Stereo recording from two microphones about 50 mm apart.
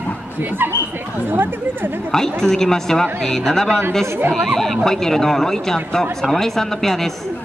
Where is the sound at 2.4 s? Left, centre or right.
Centre.